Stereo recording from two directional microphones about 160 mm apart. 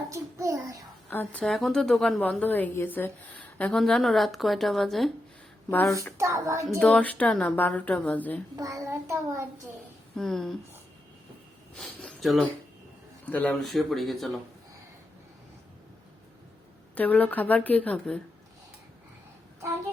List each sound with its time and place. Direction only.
0.1 s a sound: 20° right (ahead or behind)
1.1 s a woman's voice: 10° left (ahead or behind)
5.7 s a woman's voice: 20° left (ahead or behind)
6.1 s child singing: 20° right (ahead or behind)
6.7 s a woman's voice: 10° left (ahead or behind)
8.5 s child singing: 20° right (ahead or behind)
10.2 s speech: centre (ahead or behind)
11.7 s speech: 5° left (ahead or behind)
16.9 s a woman's voice: 10° left (ahead or behind)